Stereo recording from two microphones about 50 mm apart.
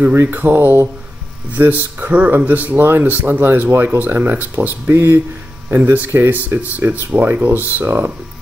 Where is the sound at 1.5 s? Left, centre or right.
Right.